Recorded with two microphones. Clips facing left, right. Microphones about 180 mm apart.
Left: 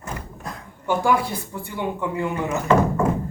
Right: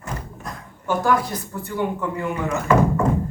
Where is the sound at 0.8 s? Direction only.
10° left (ahead or behind).